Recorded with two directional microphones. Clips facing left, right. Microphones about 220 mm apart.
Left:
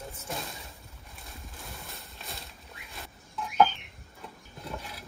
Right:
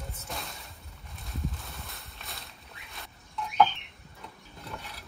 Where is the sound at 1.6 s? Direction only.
Centre (ahead or behind).